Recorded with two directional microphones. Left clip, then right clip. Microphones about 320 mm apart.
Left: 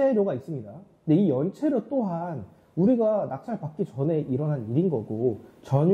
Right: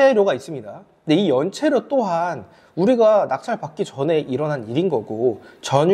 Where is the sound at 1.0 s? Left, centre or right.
Centre.